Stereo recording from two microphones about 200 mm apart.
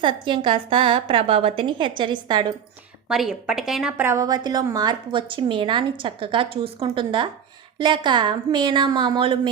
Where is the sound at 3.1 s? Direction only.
5° right (ahead or behind); by 9.4 s 25° right (ahead or behind).